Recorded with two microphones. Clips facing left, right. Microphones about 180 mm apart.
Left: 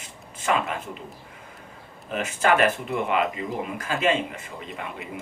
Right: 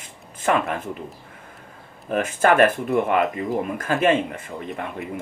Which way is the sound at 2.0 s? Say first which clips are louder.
Right 4 dB; 50° right (ahead or behind).